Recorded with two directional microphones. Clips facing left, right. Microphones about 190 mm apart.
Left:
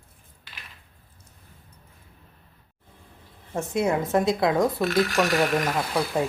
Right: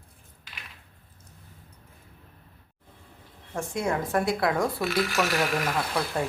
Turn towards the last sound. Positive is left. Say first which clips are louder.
# left 3 dB
turn(degrees=15)  # may be behind; listen again after turning